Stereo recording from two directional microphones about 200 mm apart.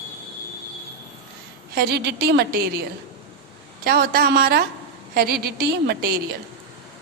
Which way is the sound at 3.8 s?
50° right (ahead or behind).